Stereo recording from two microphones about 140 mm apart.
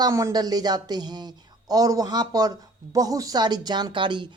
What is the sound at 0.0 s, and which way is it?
A woman's voice, 20° right (ahead or behind).